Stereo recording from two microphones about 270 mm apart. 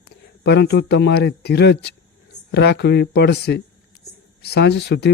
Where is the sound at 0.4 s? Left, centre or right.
Left.